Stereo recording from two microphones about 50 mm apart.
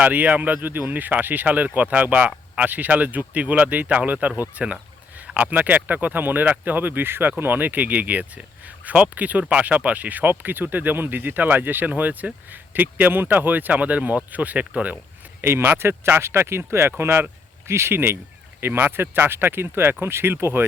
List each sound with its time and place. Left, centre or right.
0.0 s speech: right
4.6 s a sound: right
5.3 s speech: right
15.4 s speech: right